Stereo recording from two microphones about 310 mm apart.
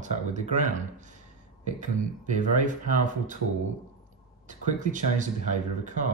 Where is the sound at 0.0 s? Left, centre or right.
Right.